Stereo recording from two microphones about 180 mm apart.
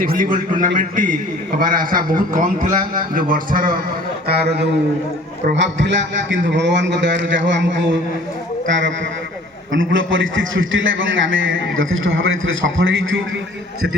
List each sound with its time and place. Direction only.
0.0 s a man's voice: 50° right (ahead or behind)
4.3 s a man's voice: 65° right (ahead or behind)
5.5 s a man's voice: 85° right
9.7 s a man's voice: 90° right